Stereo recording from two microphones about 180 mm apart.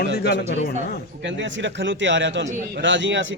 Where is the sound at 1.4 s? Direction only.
90° right.